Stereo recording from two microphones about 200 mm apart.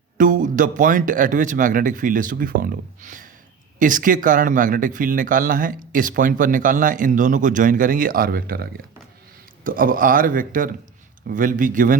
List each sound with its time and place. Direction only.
0.2 s speech: 40° right (ahead or behind)